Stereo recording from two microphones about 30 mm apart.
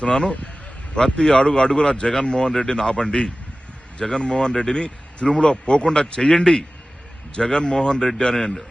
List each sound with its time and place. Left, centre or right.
0.0 s speech: left